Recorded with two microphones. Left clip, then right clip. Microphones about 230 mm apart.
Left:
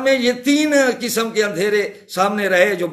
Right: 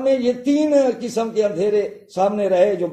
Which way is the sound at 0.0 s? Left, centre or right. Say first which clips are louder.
Left 2 dB; centre.